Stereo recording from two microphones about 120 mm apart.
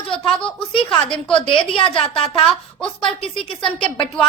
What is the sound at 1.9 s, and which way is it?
Speech, 50° left (ahead or behind).